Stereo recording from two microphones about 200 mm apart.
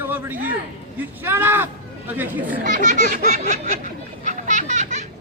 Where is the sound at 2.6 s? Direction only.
40° right (ahead or behind).